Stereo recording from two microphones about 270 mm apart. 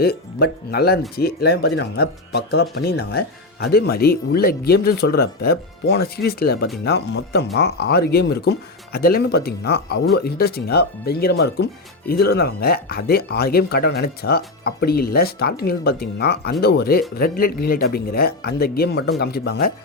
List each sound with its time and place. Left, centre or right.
0.0 s speech: left